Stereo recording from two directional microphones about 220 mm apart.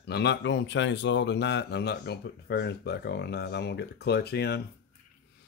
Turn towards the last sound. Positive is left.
turn(degrees=50)  # may be behind; listen again after turning